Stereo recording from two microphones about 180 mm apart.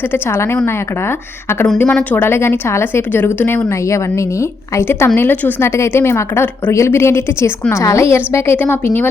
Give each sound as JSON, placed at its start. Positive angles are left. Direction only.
{"t": 0.1, "sound": "a woman's voice", "side_deg": 15}
{"t": 1.8, "sound": "a woman's voice", "side_deg": 5}